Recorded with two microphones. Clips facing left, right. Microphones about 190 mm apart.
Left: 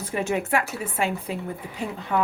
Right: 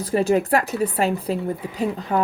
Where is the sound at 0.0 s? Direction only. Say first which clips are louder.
Right 7 dB; 35° right (ahead or behind).